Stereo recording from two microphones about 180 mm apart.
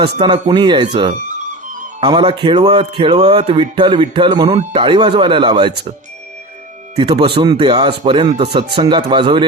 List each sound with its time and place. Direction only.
0.0 s music: 25° right (ahead or behind)
6.9 s music: 25° right (ahead or behind)